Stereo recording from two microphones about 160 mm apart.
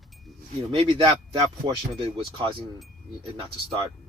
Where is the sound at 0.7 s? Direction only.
35° right (ahead or behind).